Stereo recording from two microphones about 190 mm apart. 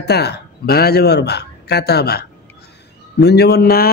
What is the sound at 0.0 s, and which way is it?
Speech, 60° left (ahead or behind).